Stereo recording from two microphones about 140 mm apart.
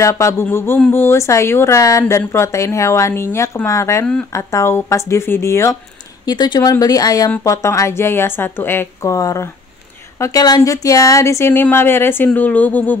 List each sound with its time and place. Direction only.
0.0 s a woman's voice: 20° left (ahead or behind)
6.2 s a woman's voice: 30° left (ahead or behind); by 12.9 s 10° left (ahead or behind)